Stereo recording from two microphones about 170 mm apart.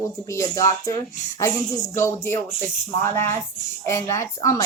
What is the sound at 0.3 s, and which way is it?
Speech, 20° left (ahead or behind).